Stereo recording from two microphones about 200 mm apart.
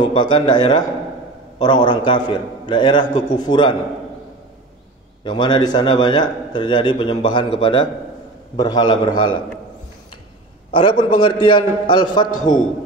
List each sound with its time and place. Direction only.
0.0 s a man's voice: 25° left (ahead or behind)
5.2 s a man's voice: 20° left (ahead or behind)
10.7 s a man's voice: 25° left (ahead or behind)
12.3 s a man's voice: 40° left (ahead or behind)